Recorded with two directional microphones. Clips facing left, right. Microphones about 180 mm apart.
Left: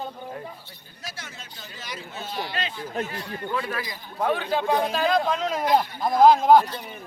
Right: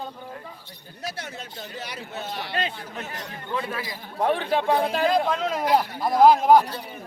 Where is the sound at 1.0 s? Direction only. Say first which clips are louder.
Right 6 dB; 60° right (ahead or behind).